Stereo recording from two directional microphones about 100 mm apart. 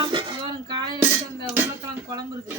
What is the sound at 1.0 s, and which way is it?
Music, 15° right (ahead or behind).